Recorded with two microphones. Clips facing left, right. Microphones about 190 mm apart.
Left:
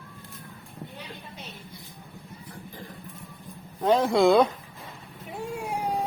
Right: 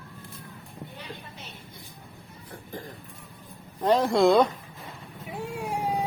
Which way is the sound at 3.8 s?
Centre (ahead or behind).